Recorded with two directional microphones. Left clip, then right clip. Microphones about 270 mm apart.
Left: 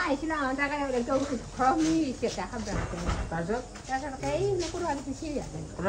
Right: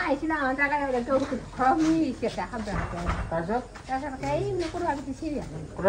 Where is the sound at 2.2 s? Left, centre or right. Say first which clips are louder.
Right 2 dB; centre.